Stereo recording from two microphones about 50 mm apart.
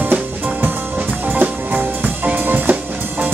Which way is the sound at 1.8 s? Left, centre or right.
Right.